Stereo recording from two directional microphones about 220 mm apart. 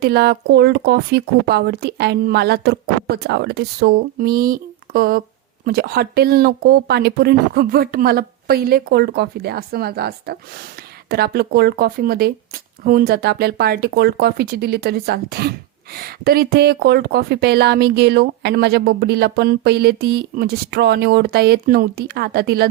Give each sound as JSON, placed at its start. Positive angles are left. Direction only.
{"t": 0.0, "sound": "speech", "side_deg": -45}